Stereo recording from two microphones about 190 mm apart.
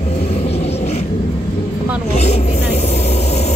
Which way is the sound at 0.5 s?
35° left (ahead or behind).